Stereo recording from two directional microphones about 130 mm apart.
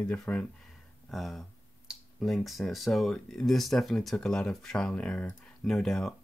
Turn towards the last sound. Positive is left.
turn(degrees=5)  # may be behind; listen again after turning